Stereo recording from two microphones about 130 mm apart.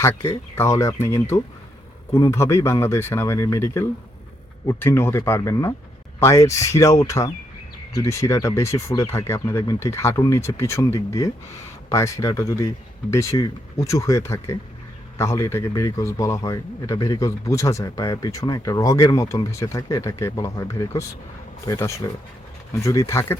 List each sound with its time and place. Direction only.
0.0 s a man's voice: 20° left (ahead or behind)